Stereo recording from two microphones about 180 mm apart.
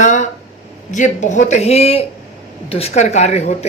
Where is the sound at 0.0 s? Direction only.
40° left (ahead or behind).